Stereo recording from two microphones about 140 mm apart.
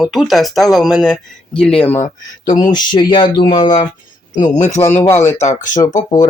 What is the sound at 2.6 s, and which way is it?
Speech, 30° left (ahead or behind).